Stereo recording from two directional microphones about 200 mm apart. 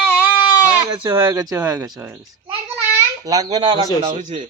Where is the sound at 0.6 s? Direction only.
10° right (ahead or behind).